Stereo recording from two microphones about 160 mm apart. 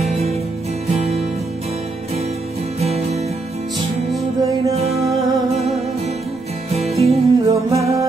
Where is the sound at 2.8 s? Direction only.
40° right (ahead or behind).